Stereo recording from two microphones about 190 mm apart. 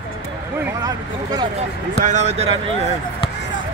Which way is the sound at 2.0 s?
40° right (ahead or behind).